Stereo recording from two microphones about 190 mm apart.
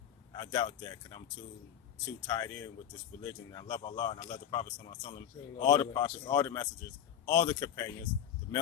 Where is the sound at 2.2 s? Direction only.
20° left (ahead or behind).